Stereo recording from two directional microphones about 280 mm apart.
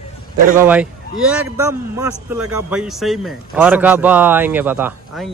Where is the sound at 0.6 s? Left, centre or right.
Centre.